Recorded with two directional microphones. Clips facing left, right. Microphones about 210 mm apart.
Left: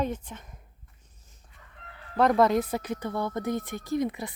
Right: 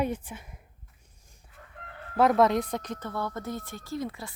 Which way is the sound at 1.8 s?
50° right (ahead or behind).